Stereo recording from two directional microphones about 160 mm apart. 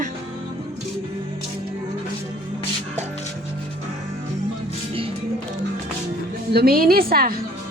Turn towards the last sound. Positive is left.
turn(degrees=-65)  # may be behind; listen again after turning